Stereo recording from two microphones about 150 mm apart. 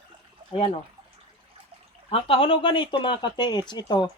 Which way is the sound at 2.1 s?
40° left (ahead or behind).